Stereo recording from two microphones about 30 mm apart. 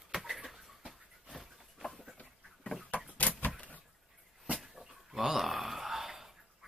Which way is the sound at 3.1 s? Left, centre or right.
Left.